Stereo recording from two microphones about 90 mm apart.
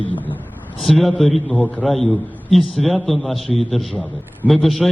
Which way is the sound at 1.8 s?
Centre (ahead or behind).